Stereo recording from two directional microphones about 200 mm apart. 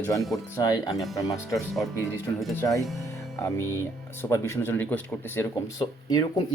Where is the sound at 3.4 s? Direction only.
15° left (ahead or behind).